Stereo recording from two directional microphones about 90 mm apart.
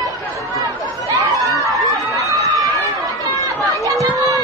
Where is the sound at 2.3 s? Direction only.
40° right (ahead or behind).